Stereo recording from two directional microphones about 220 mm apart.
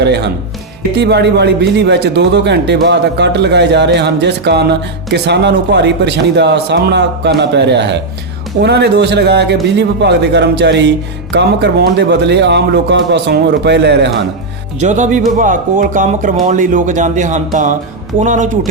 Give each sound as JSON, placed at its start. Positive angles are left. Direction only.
{"t": 0.0, "sound": "speech", "side_deg": -50}
{"t": 14.8, "sound": "speech", "side_deg": -35}